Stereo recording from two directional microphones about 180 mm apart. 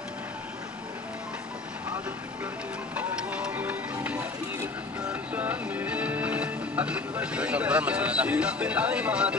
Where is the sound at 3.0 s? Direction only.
5° right (ahead or behind).